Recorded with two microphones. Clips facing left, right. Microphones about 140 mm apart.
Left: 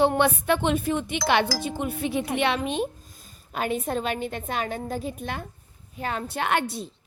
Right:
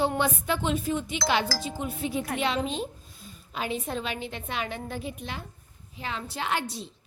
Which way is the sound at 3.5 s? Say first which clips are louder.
Left 4 dB; 50° left (ahead or behind).